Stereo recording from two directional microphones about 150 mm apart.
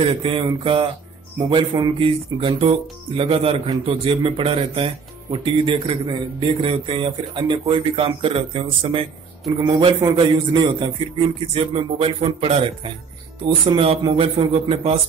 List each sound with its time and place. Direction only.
0.0 s speech: 35° right (ahead or behind)